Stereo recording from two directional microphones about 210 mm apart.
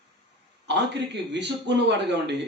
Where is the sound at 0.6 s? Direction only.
55° right (ahead or behind).